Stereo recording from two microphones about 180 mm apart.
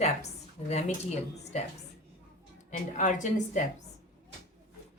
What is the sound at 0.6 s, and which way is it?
Speech, 30° left (ahead or behind).